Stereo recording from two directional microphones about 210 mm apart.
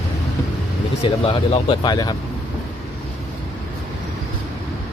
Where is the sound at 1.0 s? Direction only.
25° left (ahead or behind).